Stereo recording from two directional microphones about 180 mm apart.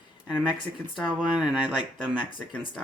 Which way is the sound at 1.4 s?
5° right (ahead or behind).